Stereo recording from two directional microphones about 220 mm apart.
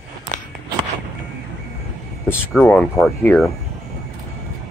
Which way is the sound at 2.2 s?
10° left (ahead or behind).